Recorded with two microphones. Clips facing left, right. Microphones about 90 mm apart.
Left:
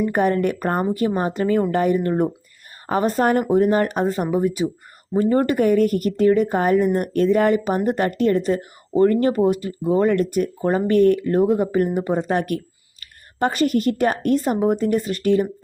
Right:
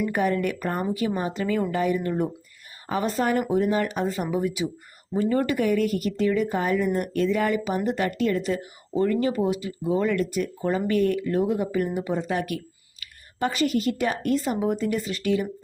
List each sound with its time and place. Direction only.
0.0 s speech: 50° left (ahead or behind)